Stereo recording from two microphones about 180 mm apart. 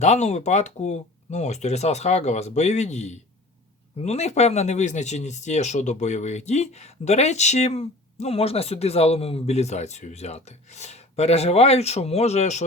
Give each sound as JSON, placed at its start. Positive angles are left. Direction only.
{"t": 0.0, "sound": "speech", "side_deg": 40}